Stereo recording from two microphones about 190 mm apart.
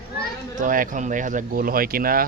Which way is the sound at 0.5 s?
45° right (ahead or behind).